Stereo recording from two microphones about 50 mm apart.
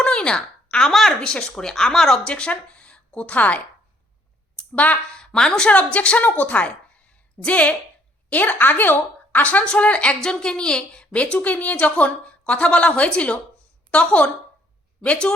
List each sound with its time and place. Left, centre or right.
0.0 s a sound: centre
1.2 s speech: centre
2.2 s speech: left
4.5 s a sound: left
5.1 s a woman's voice: centre
10.2 s a woman's voice: centre